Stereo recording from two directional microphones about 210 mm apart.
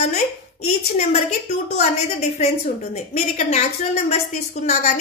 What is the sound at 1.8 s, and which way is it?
A woman's voice, 35° left (ahead or behind).